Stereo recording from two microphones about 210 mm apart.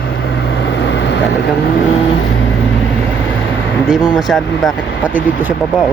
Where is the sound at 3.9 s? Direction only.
5° right (ahead or behind).